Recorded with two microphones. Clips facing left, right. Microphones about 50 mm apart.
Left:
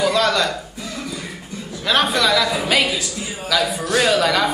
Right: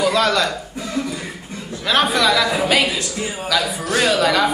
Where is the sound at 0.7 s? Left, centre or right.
Right.